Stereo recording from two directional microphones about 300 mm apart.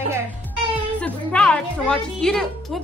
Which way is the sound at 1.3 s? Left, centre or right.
Centre.